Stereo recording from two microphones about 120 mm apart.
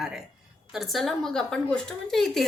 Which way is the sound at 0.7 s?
Centre (ahead or behind).